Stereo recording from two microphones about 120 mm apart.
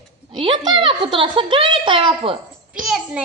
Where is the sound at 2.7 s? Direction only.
5° right (ahead or behind).